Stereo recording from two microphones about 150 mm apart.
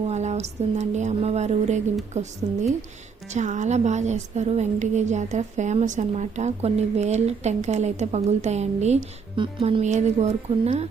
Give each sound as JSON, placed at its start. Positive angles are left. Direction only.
{"t": 0.0, "sound": "a woman's voice", "side_deg": -50}
{"t": 9.3, "sound": "speech", "side_deg": -35}
{"t": 9.8, "sound": "a woman's voice", "side_deg": -50}